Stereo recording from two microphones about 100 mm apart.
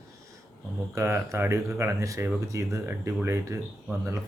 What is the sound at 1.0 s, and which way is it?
A man's voice, 30° right (ahead or behind).